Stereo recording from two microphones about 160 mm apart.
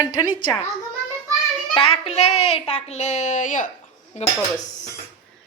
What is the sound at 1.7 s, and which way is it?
A child's voice, 40° left (ahead or behind).